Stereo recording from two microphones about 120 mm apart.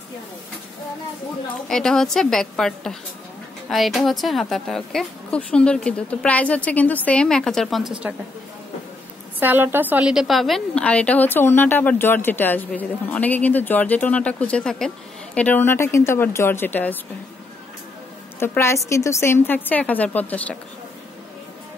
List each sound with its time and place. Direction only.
1.7 s a woman's voice: 5° left (ahead or behind)
9.4 s a woman's voice: 15° right (ahead or behind); by 17.0 s 15° left (ahead or behind)
18.4 s a woman's voice: 20° left (ahead or behind)